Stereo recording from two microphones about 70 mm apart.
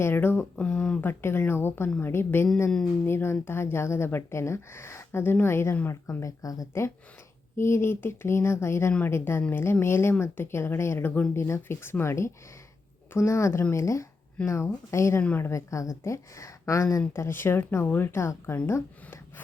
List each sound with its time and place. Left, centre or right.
0.0 s a woman's voice: left
0.5 s speech: centre
1.0 s a woman's voice: left
2.6 s speech: centre
3.1 s a woman's voice: left
7.5 s a woman's voice: left
17.2 s a woman's voice: left